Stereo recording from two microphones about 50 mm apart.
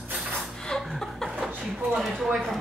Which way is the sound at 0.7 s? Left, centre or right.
Centre.